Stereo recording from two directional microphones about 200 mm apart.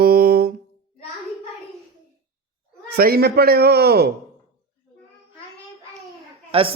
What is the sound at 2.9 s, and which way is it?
A man's voice, 50° right (ahead or behind).